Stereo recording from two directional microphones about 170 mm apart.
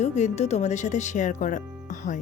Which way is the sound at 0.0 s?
40° left (ahead or behind).